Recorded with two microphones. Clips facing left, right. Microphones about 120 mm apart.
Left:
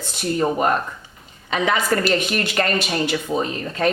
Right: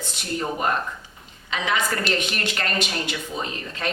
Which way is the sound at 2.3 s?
40° left (ahead or behind).